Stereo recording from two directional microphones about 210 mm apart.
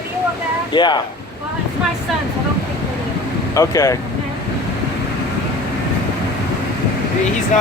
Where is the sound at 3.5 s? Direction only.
15° left (ahead or behind).